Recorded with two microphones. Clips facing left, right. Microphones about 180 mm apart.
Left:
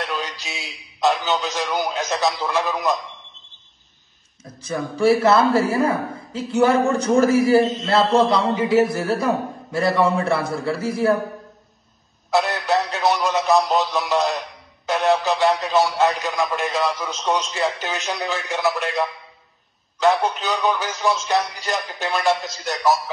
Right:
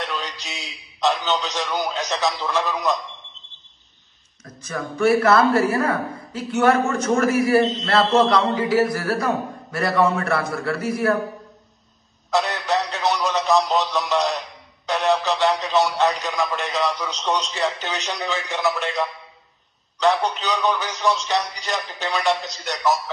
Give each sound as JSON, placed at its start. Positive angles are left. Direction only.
{"t": 0.0, "sound": "a man's voice", "side_deg": 0}
{"t": 4.6, "sound": "a man's voice", "side_deg": 30}
{"t": 7.6, "sound": "speech", "side_deg": 0}
{"t": 8.1, "sound": "a man's voice", "side_deg": 30}
{"t": 12.3, "sound": "a sound", "side_deg": 0}
{"t": 14.9, "sound": "speech", "side_deg": 0}